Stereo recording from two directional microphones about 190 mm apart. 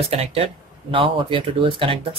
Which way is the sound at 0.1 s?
30° right (ahead or behind).